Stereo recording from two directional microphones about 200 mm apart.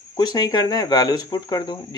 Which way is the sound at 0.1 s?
20° left (ahead or behind).